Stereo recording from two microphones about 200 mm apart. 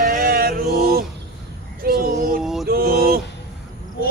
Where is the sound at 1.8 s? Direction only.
45° right (ahead or behind).